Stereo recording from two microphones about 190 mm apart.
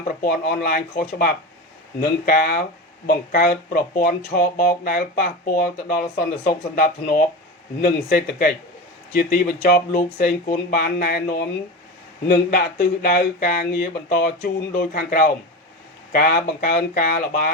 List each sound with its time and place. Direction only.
0.2 s speech: 55° left (ahead or behind)